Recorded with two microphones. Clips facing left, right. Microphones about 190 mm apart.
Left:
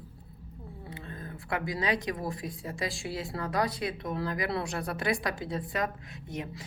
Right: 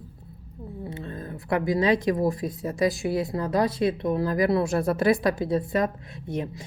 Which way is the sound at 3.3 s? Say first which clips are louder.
Right 6 dB; 20° right (ahead or behind).